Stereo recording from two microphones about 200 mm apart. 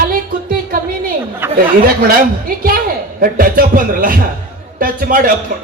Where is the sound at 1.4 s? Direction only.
10° right (ahead or behind).